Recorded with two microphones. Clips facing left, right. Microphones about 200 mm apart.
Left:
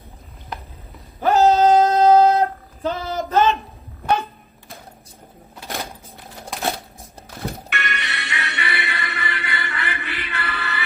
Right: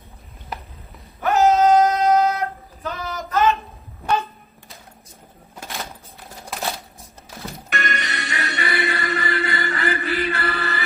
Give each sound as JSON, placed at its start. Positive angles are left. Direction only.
{"t": 1.2, "sound": "female singing", "side_deg": 30}
{"t": 6.5, "sound": "a sound", "side_deg": 0}
{"t": 7.7, "sound": "music", "side_deg": -40}